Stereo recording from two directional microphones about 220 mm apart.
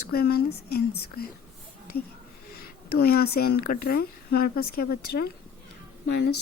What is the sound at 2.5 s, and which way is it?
Speech, 45° left (ahead or behind).